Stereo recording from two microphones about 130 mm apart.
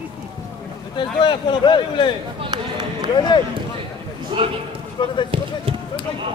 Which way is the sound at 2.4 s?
35° right (ahead or behind).